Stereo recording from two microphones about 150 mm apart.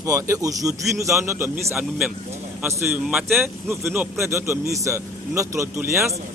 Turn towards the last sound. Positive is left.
turn(degrees=-20)  # may be behind; listen again after turning